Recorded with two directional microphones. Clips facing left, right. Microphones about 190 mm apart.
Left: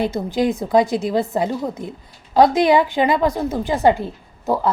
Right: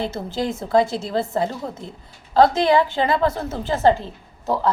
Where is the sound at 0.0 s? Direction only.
15° left (ahead or behind).